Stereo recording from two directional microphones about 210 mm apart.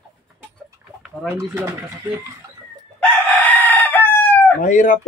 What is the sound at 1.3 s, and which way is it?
Speech, 10° right (ahead or behind).